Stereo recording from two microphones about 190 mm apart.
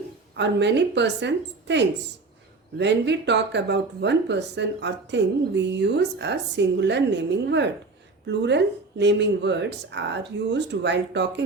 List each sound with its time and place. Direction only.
0.3 s speech: 65° right (ahead or behind)